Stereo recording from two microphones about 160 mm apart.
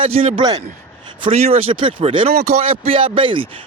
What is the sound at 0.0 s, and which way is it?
Speech, 35° right (ahead or behind).